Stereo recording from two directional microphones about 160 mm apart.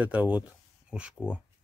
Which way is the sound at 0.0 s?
10° right (ahead or behind).